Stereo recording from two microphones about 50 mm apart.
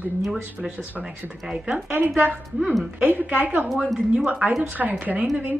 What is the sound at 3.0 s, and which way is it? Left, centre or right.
Speech, right.